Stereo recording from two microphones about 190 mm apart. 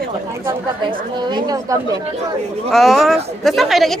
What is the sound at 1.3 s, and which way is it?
Speech, 20° right (ahead or behind).